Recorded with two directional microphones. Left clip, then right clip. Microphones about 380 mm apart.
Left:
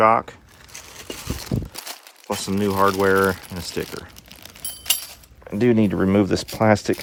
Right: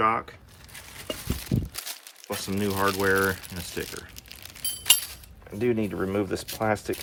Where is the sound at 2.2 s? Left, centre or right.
Centre.